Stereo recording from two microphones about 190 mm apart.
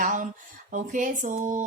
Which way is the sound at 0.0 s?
40° right (ahead or behind).